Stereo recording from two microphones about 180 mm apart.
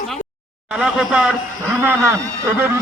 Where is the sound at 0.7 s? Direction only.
5° right (ahead or behind).